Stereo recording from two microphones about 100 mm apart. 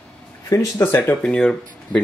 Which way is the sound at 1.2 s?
5° left (ahead or behind).